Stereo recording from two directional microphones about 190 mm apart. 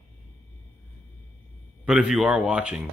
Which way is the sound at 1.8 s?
5° right (ahead or behind).